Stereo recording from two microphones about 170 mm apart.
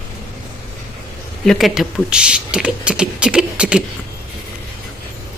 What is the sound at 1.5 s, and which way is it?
Speech, centre (ahead or behind).